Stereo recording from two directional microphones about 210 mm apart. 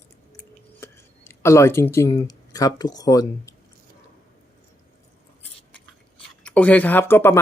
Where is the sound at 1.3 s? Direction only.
15° left (ahead or behind).